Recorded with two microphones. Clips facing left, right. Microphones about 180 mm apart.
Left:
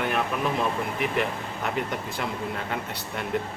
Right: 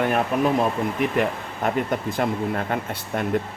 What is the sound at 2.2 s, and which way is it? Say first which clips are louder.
Speech: right 7 dB; 50° right (ahead or behind).